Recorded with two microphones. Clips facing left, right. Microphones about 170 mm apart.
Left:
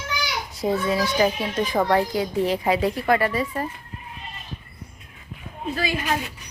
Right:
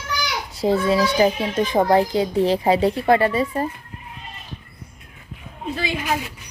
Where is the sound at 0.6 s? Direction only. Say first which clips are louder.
Right 4 dB; 30° right (ahead or behind).